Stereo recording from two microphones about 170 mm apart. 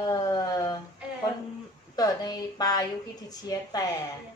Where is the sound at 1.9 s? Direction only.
20° left (ahead or behind).